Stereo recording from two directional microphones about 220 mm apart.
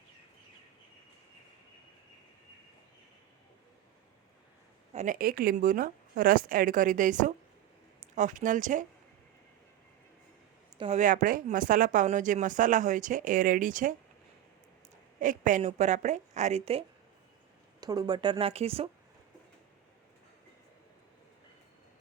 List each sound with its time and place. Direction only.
4.9 s speech: 40° right (ahead or behind)
10.8 s speech: 30° right (ahead or behind)
15.2 s speech: 35° right (ahead or behind)
17.7 s speech: 15° right (ahead or behind)